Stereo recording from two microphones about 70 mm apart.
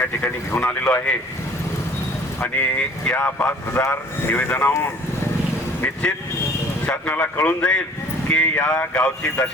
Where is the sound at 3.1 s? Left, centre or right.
Left.